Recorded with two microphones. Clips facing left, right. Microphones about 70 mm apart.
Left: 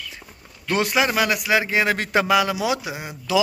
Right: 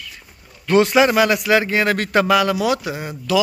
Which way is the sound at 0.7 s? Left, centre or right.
Centre.